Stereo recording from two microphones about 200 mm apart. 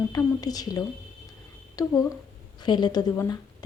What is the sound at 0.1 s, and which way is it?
A woman's voice, 20° left (ahead or behind).